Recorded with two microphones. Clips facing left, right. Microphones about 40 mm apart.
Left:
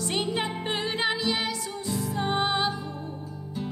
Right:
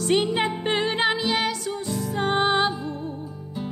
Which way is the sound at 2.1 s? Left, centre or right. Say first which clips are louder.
Right 5 dB; right.